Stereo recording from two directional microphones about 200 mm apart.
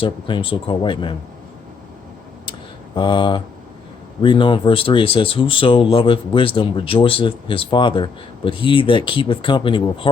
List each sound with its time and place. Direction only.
0.0 s speech: 25° left (ahead or behind)
2.5 s typing: 25° left (ahead or behind)
4.2 s speech: 25° left (ahead or behind)